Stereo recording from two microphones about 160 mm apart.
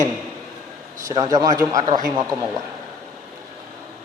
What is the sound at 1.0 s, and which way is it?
Speech, 20° right (ahead or behind).